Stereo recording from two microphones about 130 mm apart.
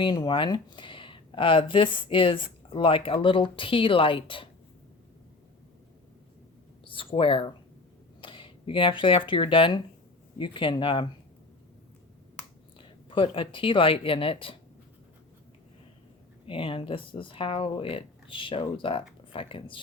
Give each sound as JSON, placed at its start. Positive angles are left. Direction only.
{"t": 0.0, "sound": "speech", "side_deg": 35}
{"t": 6.8, "sound": "speech", "side_deg": 40}
{"t": 13.1, "sound": "speech", "side_deg": 40}
{"t": 16.5, "sound": "speech", "side_deg": 45}